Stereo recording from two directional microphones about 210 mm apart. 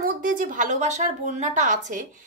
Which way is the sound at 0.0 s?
40° right (ahead or behind).